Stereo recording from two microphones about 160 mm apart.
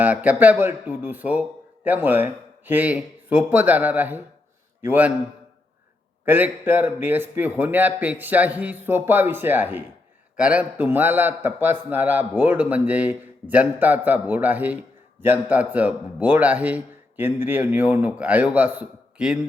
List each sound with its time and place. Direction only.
0.0 s a man's voice: 10° right (ahead or behind)
6.2 s a man's voice: 10° right (ahead or behind)